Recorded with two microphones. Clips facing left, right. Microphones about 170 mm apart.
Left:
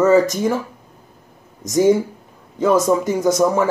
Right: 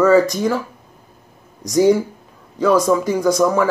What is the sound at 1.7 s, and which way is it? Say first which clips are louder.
Speech: right 1 dB; 20° left (ahead or behind).